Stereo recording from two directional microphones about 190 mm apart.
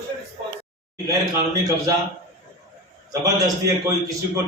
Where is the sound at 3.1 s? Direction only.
15° right (ahead or behind).